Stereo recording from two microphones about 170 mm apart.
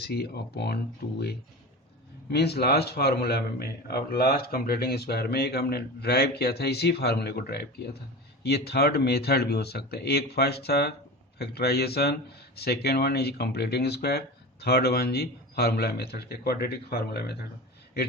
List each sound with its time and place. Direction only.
0.0 s a man's voice: 70° left (ahead or behind)
1.0 s speech: 65° left (ahead or behind)
2.3 s a man's voice: 70° left (ahead or behind)